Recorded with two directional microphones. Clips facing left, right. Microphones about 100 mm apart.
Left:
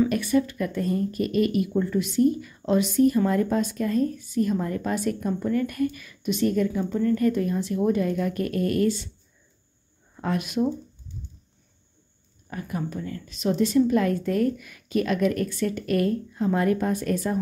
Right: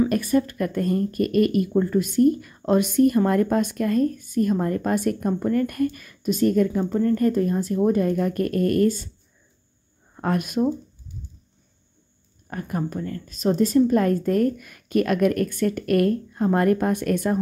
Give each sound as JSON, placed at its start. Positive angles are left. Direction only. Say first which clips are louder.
{"t": 0.1, "sound": "a woman's voice", "louder": "right 2 dB", "side_deg": -45}
{"t": 10.1, "sound": "speech", "louder": "right 3 dB", "side_deg": -50}
{"t": 12.4, "sound": "a woman's voice", "louder": "right 3 dB", "side_deg": -50}